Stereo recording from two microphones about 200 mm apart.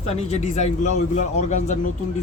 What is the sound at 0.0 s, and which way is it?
A man's voice, 30° left (ahead or behind).